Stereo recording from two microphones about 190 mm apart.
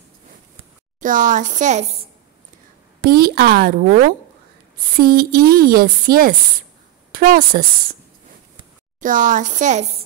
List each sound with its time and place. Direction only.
1.0 s a woman's voice: 45° right (ahead or behind)
3.0 s a woman's voice: 55° right (ahead or behind)
9.0 s a woman's voice: 45° right (ahead or behind)